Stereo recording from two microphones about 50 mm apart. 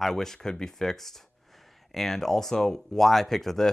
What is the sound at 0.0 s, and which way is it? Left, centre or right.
Speech, centre.